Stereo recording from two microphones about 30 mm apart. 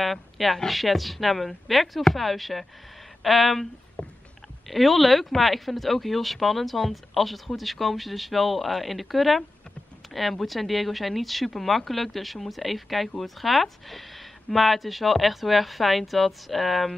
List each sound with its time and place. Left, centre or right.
0.0 s a woman's voice: centre
4.0 s a sound: left
4.6 s speech: centre